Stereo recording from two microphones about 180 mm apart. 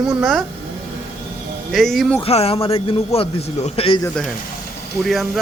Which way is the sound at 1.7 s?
Centre (ahead or behind).